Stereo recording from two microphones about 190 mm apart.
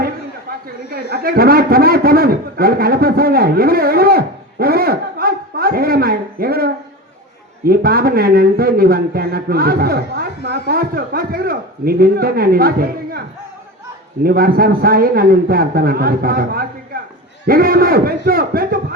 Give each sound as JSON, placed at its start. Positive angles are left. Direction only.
{"t": 0.9, "sound": "a man's voice", "side_deg": -50}
{"t": 14.3, "sound": "speech", "side_deg": -50}